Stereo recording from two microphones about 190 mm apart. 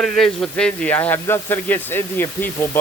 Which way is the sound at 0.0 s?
Centre (ahead or behind).